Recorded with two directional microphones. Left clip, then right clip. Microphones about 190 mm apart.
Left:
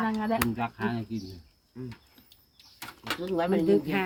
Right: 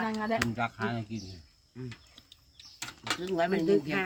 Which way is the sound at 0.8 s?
35° right (ahead or behind).